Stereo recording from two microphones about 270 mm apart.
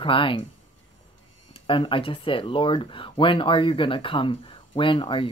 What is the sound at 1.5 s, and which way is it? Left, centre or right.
Speech, centre.